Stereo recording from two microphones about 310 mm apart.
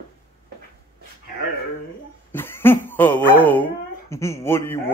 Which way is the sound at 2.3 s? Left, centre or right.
Centre.